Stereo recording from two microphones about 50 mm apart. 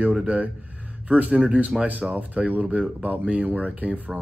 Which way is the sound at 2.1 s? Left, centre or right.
Right.